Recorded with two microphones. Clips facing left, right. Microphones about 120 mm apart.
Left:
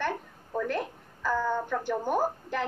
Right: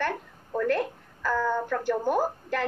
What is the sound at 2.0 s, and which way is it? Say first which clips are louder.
Speech: right 1 dB; 10° right (ahead or behind).